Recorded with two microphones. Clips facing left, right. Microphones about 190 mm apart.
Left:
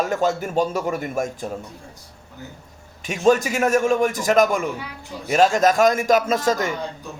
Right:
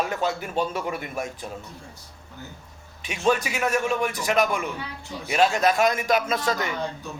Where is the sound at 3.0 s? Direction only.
45° left (ahead or behind).